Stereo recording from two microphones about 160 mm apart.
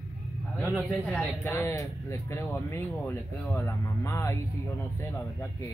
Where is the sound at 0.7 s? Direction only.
Centre (ahead or behind).